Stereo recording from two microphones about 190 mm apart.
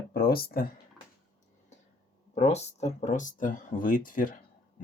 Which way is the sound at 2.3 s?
35° left (ahead or behind).